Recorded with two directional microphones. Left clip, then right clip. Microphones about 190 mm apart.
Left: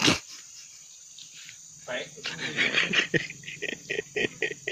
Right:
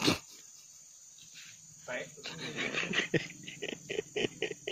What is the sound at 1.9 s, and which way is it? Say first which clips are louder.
Dog: left 6 dB; 5° right (ahead or behind).